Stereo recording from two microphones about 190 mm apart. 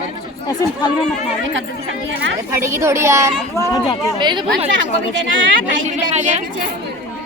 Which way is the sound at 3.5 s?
15° left (ahead or behind).